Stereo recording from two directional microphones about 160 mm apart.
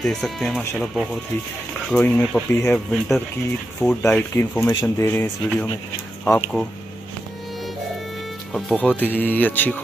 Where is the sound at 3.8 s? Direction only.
15° left (ahead or behind).